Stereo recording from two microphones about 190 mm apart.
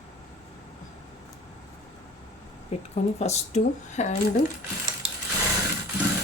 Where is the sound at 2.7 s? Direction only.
35° left (ahead or behind).